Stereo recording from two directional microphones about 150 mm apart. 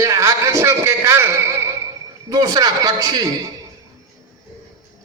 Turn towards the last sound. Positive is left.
turn(degrees=-25)  # may be behind; listen again after turning